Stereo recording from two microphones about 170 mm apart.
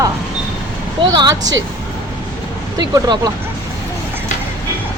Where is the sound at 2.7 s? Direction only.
25° right (ahead or behind).